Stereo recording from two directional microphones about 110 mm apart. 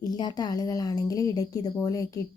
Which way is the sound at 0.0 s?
40° left (ahead or behind).